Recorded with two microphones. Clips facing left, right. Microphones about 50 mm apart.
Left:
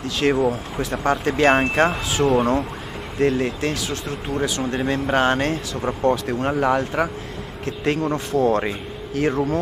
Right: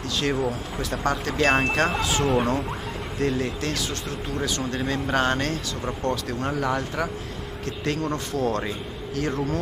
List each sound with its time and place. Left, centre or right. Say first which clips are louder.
0.2 s speech: left 7 dB; left
2.2 s speech: left 6 dB; centre
3.2 s speech: left 6 dB; centre
6.2 s speech: left 6 dB; left